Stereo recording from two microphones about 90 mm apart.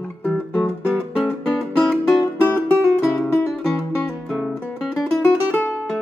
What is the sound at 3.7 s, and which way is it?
Music, 5° left (ahead or behind).